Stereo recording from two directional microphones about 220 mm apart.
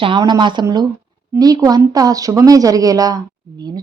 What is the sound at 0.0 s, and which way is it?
A woman's voice, 20° right (ahead or behind).